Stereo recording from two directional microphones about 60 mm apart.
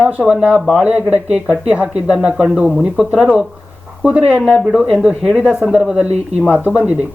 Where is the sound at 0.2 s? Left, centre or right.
Centre.